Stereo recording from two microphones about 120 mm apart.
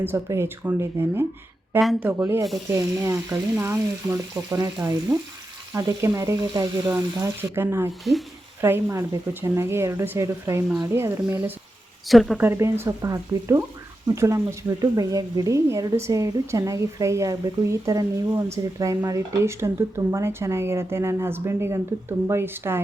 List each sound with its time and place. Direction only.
0.0 s speech: 20° right (ahead or behind)
8.1 s a woman's voice: centre (ahead or behind)
8.6 s speech: 20° right (ahead or behind)
12.0 s a woman's voice: centre (ahead or behind)
12.4 s speech: 20° right (ahead or behind)